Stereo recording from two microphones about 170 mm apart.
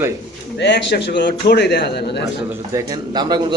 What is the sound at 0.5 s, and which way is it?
A man's voice, 90° left.